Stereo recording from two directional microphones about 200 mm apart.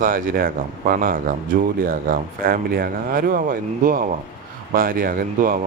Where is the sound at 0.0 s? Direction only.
45° right (ahead or behind).